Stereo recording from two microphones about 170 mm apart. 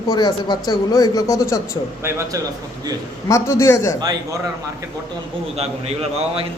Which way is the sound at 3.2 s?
15° left (ahead or behind).